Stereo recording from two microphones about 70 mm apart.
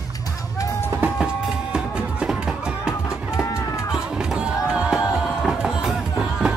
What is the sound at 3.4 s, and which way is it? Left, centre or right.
Music, left.